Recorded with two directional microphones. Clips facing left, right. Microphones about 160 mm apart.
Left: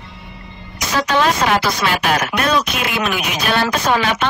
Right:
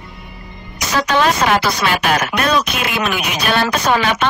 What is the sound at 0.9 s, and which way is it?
Speech, 70° right (ahead or behind).